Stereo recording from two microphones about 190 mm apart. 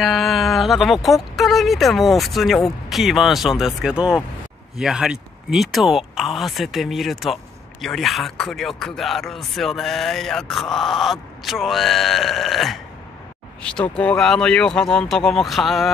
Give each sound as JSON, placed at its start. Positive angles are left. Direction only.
{"t": 0.0, "sound": "speech", "side_deg": 0}